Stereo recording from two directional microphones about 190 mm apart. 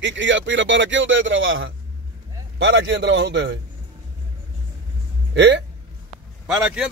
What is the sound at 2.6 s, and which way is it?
Speech, 70° right (ahead or behind).